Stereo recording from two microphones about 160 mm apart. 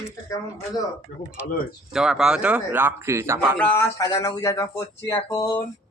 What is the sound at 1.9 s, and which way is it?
Speech, 5° right (ahead or behind).